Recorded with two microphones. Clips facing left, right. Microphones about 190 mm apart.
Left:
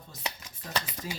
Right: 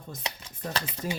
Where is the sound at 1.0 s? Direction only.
50° right (ahead or behind).